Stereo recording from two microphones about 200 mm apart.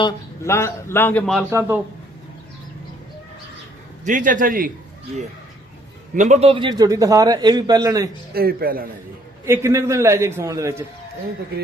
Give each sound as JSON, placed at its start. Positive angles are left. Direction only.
{"t": 0.0, "sound": "a man's voice", "side_deg": 15}
{"t": 1.5, "sound": "a man's voice", "side_deg": -15}
{"t": 4.0, "sound": "a man's voice", "side_deg": -40}
{"t": 8.3, "sound": "a man's voice", "side_deg": -50}
{"t": 9.5, "sound": "a man's voice", "side_deg": -15}